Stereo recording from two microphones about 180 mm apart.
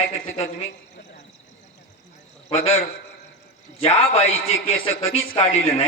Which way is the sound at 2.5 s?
35° left (ahead or behind).